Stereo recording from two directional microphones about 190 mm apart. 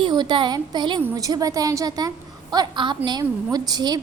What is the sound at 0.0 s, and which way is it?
A woman's voice, 25° right (ahead or behind).